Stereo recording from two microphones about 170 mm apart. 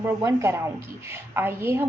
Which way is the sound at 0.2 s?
20° right (ahead or behind).